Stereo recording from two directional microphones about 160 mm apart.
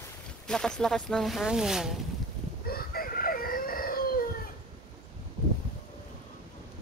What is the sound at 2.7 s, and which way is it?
Chicken, 65° left (ahead or behind).